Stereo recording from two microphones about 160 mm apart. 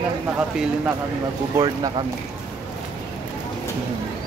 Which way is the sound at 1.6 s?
30° right (ahead or behind).